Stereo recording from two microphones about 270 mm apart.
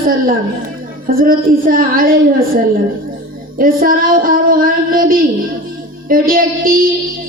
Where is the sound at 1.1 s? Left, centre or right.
Right.